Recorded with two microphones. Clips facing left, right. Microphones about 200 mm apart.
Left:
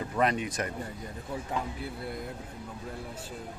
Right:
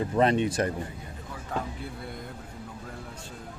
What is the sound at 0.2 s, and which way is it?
Speech, 30° right (ahead or behind).